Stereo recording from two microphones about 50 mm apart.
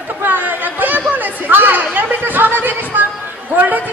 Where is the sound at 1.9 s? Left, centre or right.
Right.